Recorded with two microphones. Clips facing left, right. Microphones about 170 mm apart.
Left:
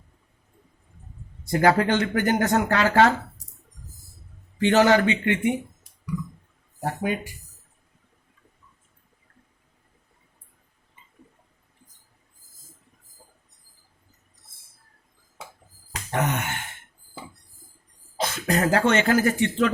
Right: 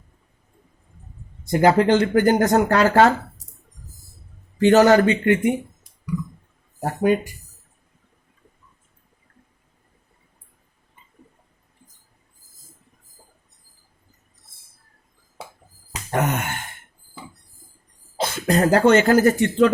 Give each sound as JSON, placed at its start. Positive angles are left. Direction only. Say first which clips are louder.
{"t": 1.5, "sound": "speech", "louder": "right 4 dB", "side_deg": -25}
{"t": 4.5, "sound": "speech", "louder": "right 5 dB", "side_deg": -40}
{"t": 6.8, "sound": "speech", "louder": "right 7 dB", "side_deg": -45}
{"t": 16.1, "sound": "speech", "louder": "right 3 dB", "side_deg": -50}
{"t": 18.2, "sound": "speech", "louder": "right 4 dB", "side_deg": -30}